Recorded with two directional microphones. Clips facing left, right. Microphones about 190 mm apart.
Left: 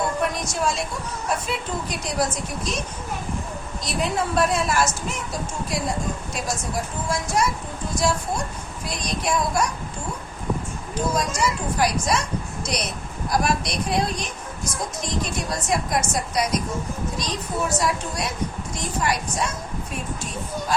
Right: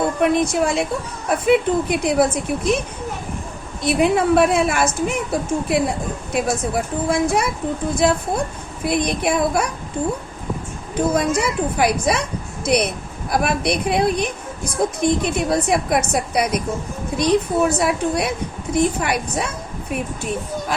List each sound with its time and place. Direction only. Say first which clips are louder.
0.2 s a woman's voice: right 8 dB; 60° right (ahead or behind)
3.8 s a woman's voice: right 9 dB; 60° right (ahead or behind)
10.9 s a woman's voice: right 6 dB; 60° right (ahead or behind)